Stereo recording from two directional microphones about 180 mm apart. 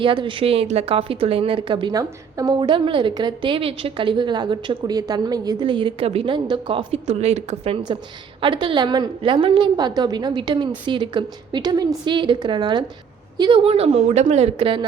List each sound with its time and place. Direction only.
0.0 s a woman's voice: 30° right (ahead or behind)